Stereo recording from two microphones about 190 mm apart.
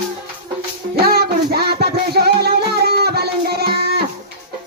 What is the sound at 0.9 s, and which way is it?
Music, 55° right (ahead or behind).